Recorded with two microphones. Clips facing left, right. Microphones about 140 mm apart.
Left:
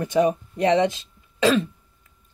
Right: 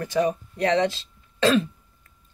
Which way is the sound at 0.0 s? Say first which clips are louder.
Left 3 dB; 20° left (ahead or behind).